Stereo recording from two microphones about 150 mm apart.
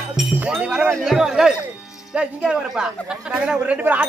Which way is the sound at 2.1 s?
5° right (ahead or behind).